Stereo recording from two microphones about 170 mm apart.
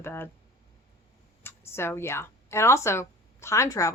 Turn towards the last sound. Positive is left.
turn(degrees=20)  # may be behind; listen again after turning